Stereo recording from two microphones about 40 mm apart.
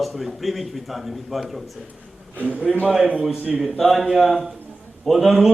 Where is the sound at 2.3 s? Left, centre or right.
Right.